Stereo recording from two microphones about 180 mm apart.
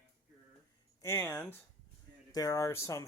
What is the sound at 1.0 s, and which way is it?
Speech, 15° left (ahead or behind).